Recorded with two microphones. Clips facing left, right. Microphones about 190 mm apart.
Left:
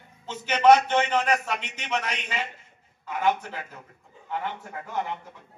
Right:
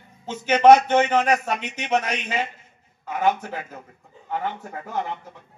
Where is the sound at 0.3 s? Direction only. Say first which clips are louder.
Right 4 dB; 50° right (ahead or behind).